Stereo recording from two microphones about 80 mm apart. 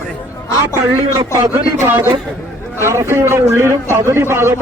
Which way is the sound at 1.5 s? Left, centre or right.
Right.